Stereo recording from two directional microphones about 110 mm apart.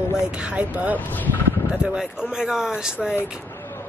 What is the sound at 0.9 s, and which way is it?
Speech, 15° left (ahead or behind).